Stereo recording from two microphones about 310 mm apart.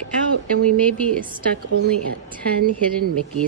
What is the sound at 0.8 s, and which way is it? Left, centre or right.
Speech, centre.